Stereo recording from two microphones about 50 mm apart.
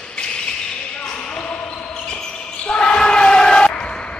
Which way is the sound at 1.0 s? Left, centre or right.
Centre.